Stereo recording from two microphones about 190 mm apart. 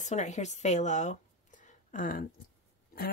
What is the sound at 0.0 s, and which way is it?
Speech, 40° left (ahead or behind).